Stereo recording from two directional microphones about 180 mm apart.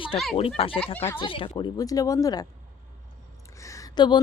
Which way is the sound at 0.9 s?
10° left (ahead or behind).